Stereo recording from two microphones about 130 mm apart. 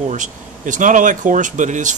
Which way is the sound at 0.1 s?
75° right (ahead or behind).